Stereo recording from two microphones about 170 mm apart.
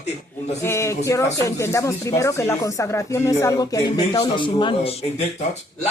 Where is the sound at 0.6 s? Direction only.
15° left (ahead or behind); by 5.2 s 35° left (ahead or behind).